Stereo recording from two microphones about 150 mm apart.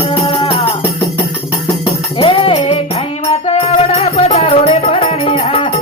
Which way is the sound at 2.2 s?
35° left (ahead or behind).